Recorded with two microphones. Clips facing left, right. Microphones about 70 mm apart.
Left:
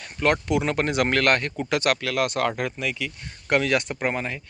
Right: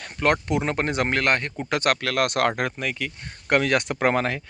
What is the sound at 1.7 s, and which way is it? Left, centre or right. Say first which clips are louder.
Speech: right 1 dB; right.